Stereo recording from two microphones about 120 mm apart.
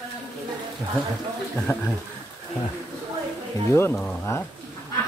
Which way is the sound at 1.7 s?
15° left (ahead or behind).